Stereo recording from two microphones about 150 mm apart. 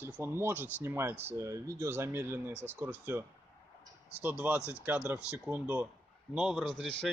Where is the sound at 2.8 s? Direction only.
15° right (ahead or behind).